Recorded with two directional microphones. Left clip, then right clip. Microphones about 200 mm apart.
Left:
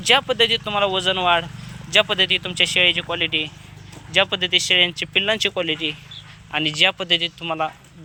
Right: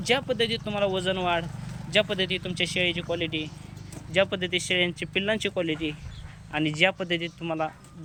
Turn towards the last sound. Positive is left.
turn(degrees=-15)  # may be behind; listen again after turning